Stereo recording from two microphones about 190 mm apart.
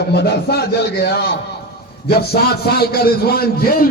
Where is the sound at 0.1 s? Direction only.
60° left (ahead or behind).